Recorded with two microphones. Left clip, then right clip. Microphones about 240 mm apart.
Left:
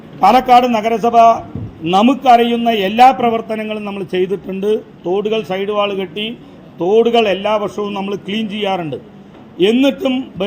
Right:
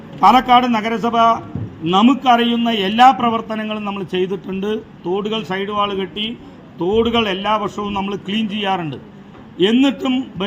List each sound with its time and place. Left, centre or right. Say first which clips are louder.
0.2 s a man's voice: left 2 dB; centre